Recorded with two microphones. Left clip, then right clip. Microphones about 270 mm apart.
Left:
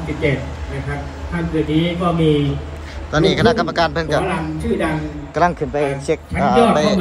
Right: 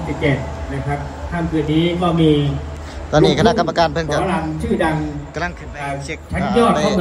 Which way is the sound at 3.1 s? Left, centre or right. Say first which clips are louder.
Right 1 dB; centre.